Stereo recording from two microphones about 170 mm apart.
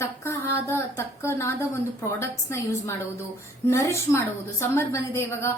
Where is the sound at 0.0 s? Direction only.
15° left (ahead or behind).